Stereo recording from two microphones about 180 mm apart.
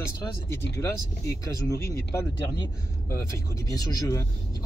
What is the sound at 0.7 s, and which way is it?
Speech, 15° left (ahead or behind).